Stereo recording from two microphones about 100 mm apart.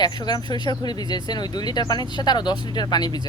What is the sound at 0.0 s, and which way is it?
Speech, 45° left (ahead or behind).